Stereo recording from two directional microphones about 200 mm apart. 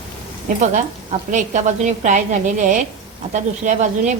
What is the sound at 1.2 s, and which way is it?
A woman's voice, 35° right (ahead or behind).